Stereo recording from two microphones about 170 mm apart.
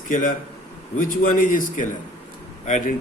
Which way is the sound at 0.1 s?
50° left (ahead or behind).